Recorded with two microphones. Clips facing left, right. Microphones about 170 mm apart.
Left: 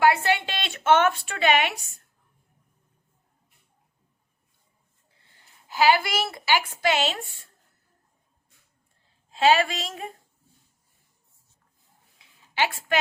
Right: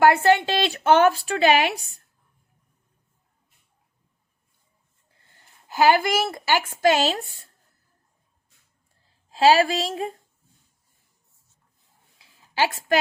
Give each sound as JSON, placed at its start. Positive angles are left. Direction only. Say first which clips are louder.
{"t": 0.0, "sound": "a woman's voice", "louder": "right 4 dB", "side_deg": -45}
{"t": 5.2, "sound": "a woman's voice", "louder": "right 2 dB", "side_deg": -50}
{"t": 9.3, "sound": "a woman's voice", "louder": "right 3 dB", "side_deg": -35}
{"t": 12.2, "sound": "a sound", "louder": "right 3 dB", "side_deg": -40}